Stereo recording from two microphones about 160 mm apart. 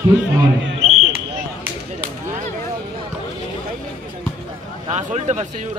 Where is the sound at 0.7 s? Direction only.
40° right (ahead or behind).